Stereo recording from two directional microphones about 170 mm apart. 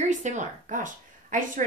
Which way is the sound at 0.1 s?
45° right (ahead or behind).